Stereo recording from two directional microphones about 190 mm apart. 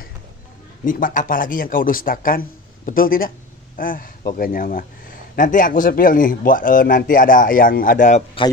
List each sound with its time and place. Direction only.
0.8 s speech: 45° left (ahead or behind)